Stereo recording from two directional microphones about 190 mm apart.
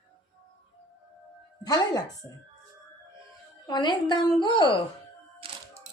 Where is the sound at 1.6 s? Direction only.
20° left (ahead or behind).